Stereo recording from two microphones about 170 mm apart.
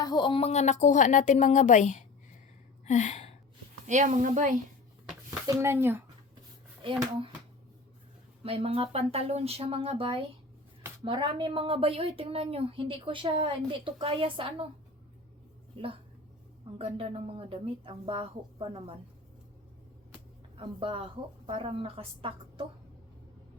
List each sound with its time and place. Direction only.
0.0 s a woman's voice: 25° left (ahead or behind); by 2.0 s 45° left (ahead or behind)
2.8 s a sound: 45° left (ahead or behind)
3.8 s speech: 45° right (ahead or behind)
5.5 s speech: 15° right (ahead or behind)
8.4 s a woman's voice: 35° right (ahead or behind)
15.7 s a woman's voice: 30° right (ahead or behind)
20.6 s a woman's voice: 30° right (ahead or behind)